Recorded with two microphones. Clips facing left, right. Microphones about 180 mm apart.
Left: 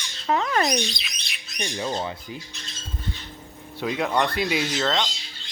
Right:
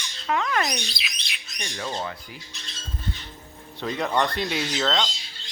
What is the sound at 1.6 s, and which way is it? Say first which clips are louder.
Speech: left 4 dB; 20° left (ahead or behind).